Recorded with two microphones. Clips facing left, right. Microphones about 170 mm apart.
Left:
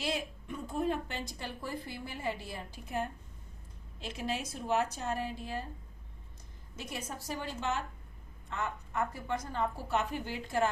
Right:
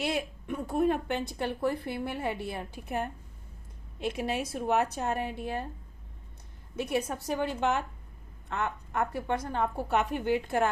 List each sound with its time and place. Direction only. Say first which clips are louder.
0.0 s a woman's voice: right 4 dB; 60° right (ahead or behind)
6.7 s a woman's voice: right 11 dB; 60° right (ahead or behind)